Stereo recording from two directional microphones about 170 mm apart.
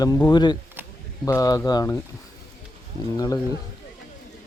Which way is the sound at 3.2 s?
20° left (ahead or behind).